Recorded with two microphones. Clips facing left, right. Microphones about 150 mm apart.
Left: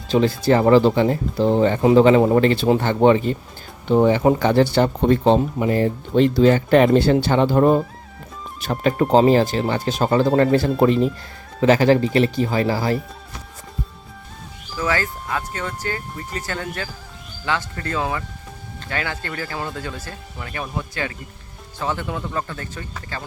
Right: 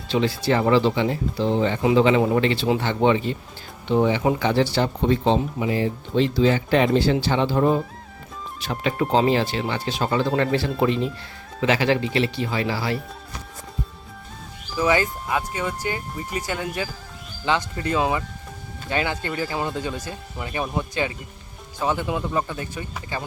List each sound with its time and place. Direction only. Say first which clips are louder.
0.1 s speech: left 4 dB; 45° left (ahead or behind)
14.8 s speech: right 3 dB; 15° right (ahead or behind)